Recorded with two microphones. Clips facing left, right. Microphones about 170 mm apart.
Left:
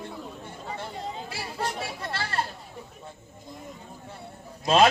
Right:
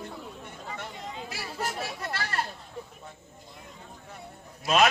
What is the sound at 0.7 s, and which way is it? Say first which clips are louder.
Speech: left 5 dB; 30° left (ahead or behind).